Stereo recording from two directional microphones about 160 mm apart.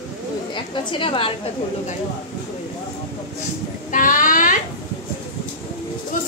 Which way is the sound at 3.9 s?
55° left (ahead or behind).